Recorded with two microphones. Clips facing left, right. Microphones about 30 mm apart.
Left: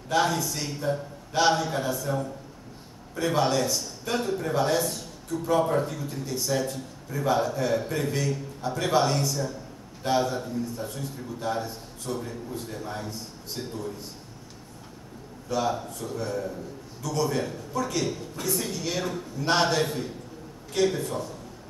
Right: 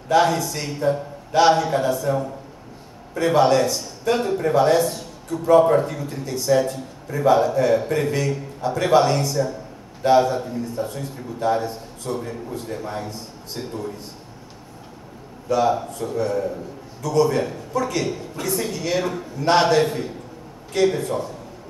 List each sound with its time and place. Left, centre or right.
0.1 s a man's voice: right
4.8 s a man's voice: centre
15.4 s a man's voice: right
19.4 s a man's voice: right